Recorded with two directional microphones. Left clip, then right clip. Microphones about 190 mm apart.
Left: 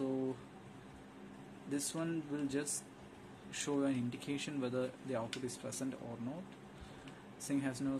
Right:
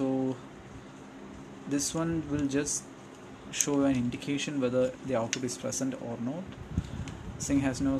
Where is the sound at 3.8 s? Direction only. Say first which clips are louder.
Right 9 dB; 5° right (ahead or behind).